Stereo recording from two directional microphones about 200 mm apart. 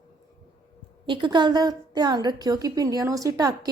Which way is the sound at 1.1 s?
25° right (ahead or behind).